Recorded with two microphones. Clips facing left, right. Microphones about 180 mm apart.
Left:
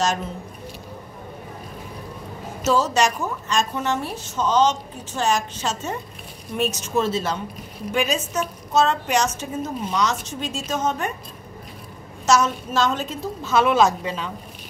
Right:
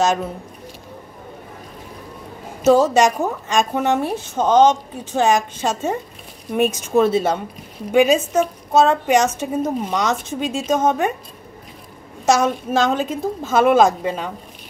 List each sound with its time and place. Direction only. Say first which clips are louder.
0.0 s a woman's voice: right 5 dB; 55° right (ahead or behind)
2.6 s a woman's voice: right 6 dB; 55° right (ahead or behind)
12.3 s a woman's voice: right 3 dB; 55° right (ahead or behind)